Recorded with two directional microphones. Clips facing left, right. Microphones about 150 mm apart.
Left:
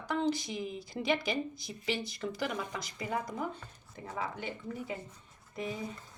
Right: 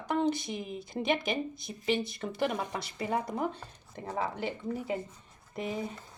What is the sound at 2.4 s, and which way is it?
Speech, 60° right (ahead or behind).